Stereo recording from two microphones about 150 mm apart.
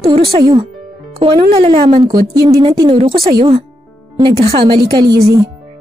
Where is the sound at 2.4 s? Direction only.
25° right (ahead or behind).